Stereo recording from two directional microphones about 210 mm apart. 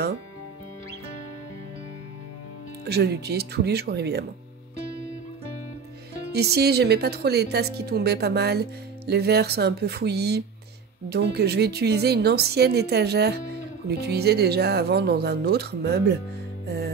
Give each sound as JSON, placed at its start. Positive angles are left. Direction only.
{"t": 2.8, "sound": "a woman's voice", "side_deg": -50}
{"t": 6.3, "sound": "a woman's voice", "side_deg": -50}
{"t": 16.6, "sound": "music", "side_deg": -50}